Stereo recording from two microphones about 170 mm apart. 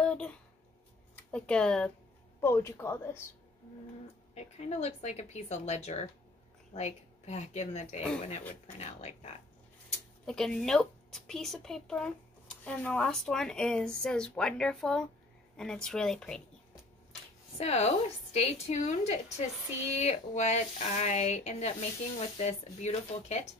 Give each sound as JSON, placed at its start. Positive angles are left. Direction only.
{"t": 0.0, "sound": "a sound", "side_deg": 5}
{"t": 1.1, "sound": "speech", "side_deg": 5}
{"t": 4.4, "sound": "speech", "side_deg": 40}
{"t": 10.2, "sound": "speech", "side_deg": 5}
{"t": 17.6, "sound": "speech", "side_deg": 40}